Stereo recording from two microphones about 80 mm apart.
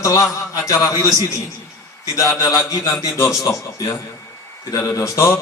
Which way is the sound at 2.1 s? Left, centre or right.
Left.